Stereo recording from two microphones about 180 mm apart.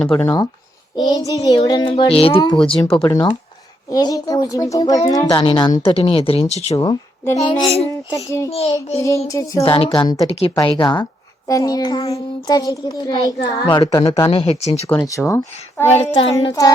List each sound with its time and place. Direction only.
0.0 s speech: 5° left (ahead or behind)
0.9 s a child's voice: 20° left (ahead or behind)
3.1 s child singing: 20° left (ahead or behind)
3.9 s a child's voice: 20° left (ahead or behind)
5.3 s a child's voice: 30° left (ahead or behind)
6.7 s speech: 20° left (ahead or behind)
7.3 s speech: 35° left (ahead or behind)
7.9 s child singing: 15° left (ahead or behind)
8.4 s speech: 35° left (ahead or behind)
9.0 s child singing: 15° left (ahead or behind)
9.6 s a child's voice: 30° left (ahead or behind)
14.8 s child singing: 15° left (ahead or behind)
15.9 s speech: 35° left (ahead or behind)
16.4 s a child's voice: 20° left (ahead or behind)